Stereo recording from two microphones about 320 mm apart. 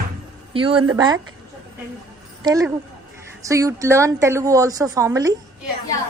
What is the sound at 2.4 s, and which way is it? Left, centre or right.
A woman's voice, centre.